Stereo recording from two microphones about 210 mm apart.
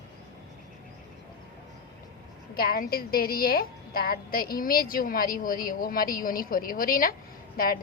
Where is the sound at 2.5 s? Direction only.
45° left (ahead or behind).